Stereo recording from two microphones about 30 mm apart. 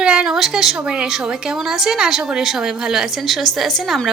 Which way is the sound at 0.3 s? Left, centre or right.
Centre.